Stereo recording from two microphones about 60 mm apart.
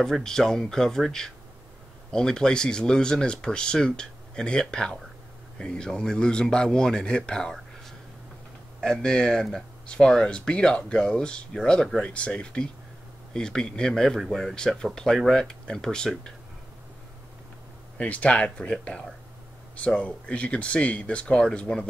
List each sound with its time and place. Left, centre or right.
0.0 s speech: centre
8.8 s speech: centre
17.9 s speech: left